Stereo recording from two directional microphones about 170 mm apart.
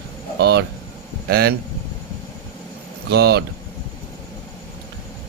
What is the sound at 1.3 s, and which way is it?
Speech, 70° right (ahead or behind).